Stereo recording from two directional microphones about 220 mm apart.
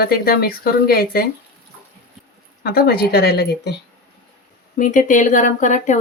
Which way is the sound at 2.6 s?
45° left (ahead or behind).